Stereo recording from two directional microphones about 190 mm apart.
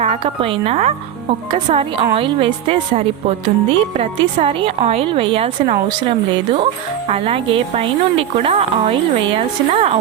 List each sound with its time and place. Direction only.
0.0 s speech: 30° right (ahead or behind)